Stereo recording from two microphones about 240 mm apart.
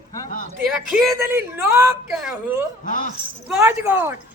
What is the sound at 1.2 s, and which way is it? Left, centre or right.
A man's voice, centre.